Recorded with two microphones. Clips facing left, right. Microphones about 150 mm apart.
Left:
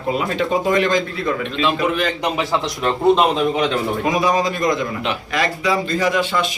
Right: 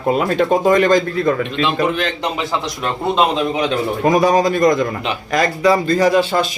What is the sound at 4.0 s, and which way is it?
Speech, 45° right (ahead or behind).